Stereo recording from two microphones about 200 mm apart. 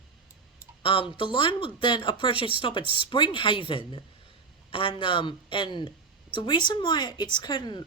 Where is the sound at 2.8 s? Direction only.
25° right (ahead or behind).